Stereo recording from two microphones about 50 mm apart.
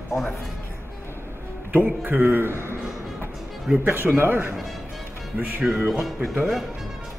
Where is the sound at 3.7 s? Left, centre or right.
Centre.